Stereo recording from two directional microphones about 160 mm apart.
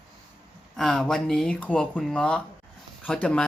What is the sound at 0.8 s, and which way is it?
Speech, 5° left (ahead or behind).